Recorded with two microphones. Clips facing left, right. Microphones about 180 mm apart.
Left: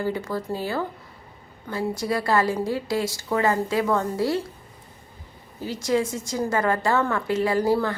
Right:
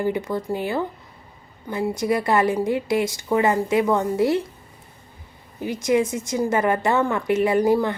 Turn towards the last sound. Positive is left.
turn(degrees=-20)  # may be behind; listen again after turning